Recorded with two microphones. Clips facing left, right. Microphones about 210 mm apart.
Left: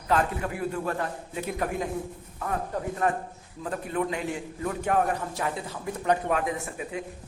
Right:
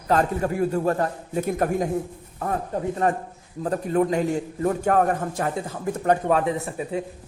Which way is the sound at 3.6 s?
40° right (ahead or behind).